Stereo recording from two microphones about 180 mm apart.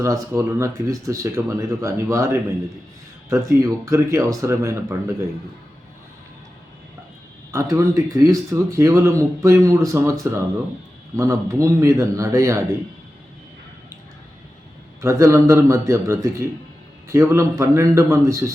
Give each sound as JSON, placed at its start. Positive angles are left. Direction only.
{"t": 0.0, "sound": "speech", "side_deg": -15}
{"t": 7.5, "sound": "speech", "side_deg": -15}
{"t": 15.0, "sound": "speech", "side_deg": -15}